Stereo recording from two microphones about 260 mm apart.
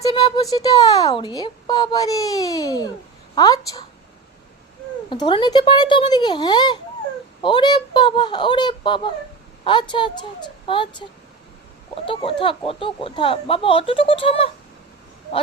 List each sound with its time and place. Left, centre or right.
0.0 s a sound: centre
0.5 s a child's voice: centre
5.0 s a child's voice: centre